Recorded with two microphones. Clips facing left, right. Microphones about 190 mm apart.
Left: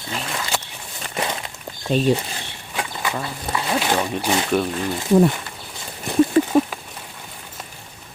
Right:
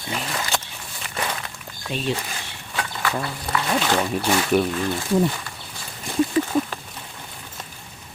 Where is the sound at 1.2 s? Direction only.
25° left (ahead or behind).